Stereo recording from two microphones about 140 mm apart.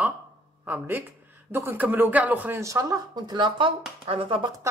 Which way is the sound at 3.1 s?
30° right (ahead or behind).